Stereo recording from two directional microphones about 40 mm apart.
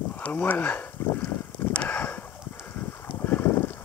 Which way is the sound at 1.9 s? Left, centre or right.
Left.